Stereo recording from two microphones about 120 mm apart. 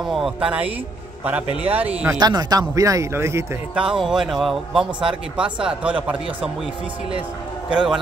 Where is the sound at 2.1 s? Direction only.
35° right (ahead or behind).